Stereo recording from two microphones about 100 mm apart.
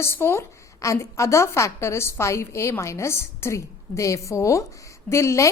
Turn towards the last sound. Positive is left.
turn(degrees=30)  # may be behind; listen again after turning